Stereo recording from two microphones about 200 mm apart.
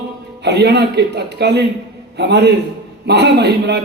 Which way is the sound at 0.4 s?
55° right (ahead or behind).